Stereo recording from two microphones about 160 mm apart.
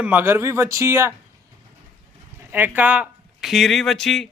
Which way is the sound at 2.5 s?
10° right (ahead or behind).